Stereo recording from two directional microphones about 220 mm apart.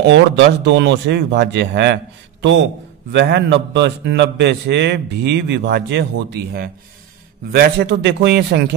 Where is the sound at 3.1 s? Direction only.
50° right (ahead or behind).